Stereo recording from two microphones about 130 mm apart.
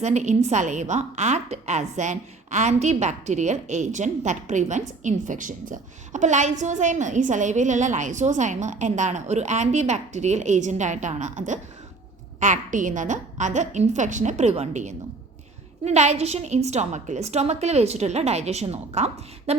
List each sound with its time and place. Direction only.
0.0 s a woman's voice: 65° right (ahead or behind)